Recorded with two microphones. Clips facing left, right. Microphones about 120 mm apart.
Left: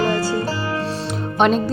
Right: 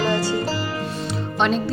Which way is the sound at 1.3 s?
50° left (ahead or behind).